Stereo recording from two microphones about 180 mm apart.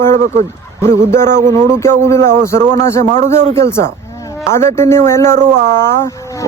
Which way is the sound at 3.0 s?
40° right (ahead or behind).